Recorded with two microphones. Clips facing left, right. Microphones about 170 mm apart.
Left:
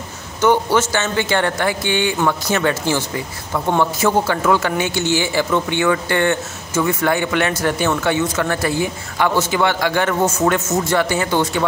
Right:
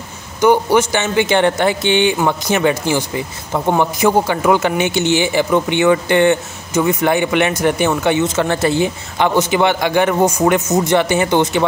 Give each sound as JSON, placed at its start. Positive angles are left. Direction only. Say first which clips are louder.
{"t": 0.4, "sound": "a man's voice", "louder": "right 3 dB", "side_deg": -15}